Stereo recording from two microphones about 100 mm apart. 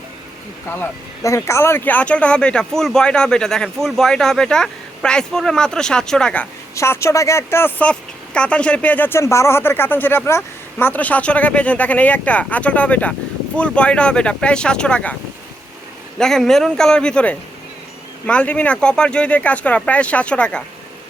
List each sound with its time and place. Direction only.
1.2 s speech: 30° left (ahead or behind); by 6.5 s 10° left (ahead or behind)
6.7 s speech: 25° left (ahead or behind)
7.8 s speech: 10° left (ahead or behind)
16.1 s a man's voice: 5° left (ahead or behind)